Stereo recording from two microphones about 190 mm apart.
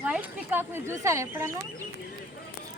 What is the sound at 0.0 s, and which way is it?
Speech, 5° right (ahead or behind).